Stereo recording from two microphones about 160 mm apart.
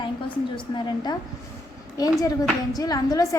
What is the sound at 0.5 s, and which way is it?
Speech, 30° left (ahead or behind).